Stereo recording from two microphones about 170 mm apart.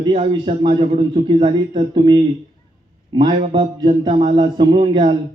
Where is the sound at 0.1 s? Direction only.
35° right (ahead or behind).